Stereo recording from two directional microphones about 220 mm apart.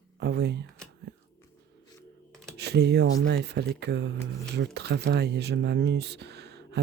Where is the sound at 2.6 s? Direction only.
50° right (ahead or behind).